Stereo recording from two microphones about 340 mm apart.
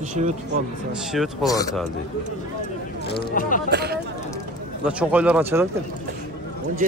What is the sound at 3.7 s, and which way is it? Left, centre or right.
Speech, right.